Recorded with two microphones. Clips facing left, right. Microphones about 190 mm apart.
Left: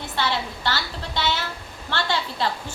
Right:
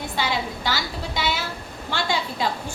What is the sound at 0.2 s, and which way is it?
A woman's voice, 10° right (ahead or behind).